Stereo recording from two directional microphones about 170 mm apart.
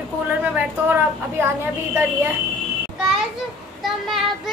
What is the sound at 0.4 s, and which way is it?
A woman's voice, 10° right (ahead or behind).